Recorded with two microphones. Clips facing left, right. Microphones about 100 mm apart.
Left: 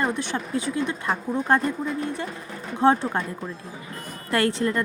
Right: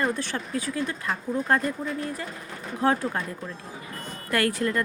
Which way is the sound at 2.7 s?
25° left (ahead or behind).